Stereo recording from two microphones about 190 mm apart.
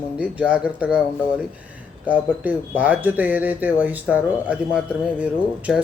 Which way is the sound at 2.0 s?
10° right (ahead or behind).